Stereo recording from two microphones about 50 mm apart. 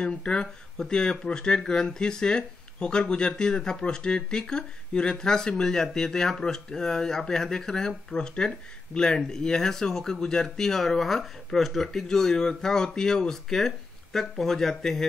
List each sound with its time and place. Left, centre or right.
0.0 s speech: centre